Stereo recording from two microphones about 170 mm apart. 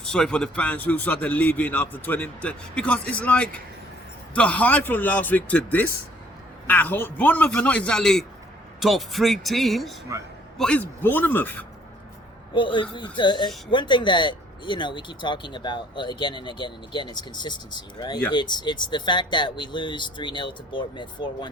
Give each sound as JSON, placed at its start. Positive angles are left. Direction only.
{"t": 0.0, "sound": "speech", "side_deg": 5}
{"t": 10.1, "sound": "a man's voice", "side_deg": -15}
{"t": 10.6, "sound": "speech", "side_deg": 10}
{"t": 12.5, "sound": "speech", "side_deg": 30}